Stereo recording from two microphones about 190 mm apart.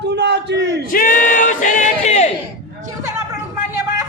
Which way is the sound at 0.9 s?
45° left (ahead or behind).